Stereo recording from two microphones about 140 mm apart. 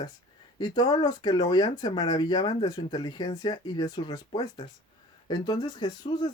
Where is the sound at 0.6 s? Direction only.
30° left (ahead or behind).